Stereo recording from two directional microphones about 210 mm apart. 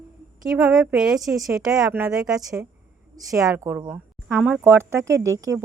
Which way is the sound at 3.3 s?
15° right (ahead or behind).